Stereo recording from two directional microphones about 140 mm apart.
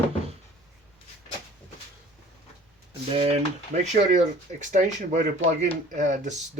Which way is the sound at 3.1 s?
50° right (ahead or behind).